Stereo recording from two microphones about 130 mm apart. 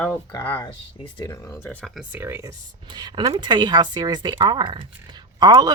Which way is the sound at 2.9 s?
35° right (ahead or behind).